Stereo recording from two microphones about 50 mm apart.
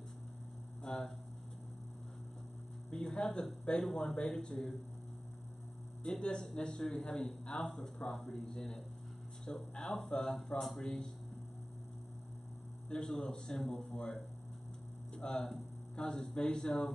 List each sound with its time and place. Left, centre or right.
0.8 s a man's voice: centre
2.9 s a man's voice: centre
6.1 s a man's voice: centre
12.9 s a man's voice: centre
15.1 s speech: centre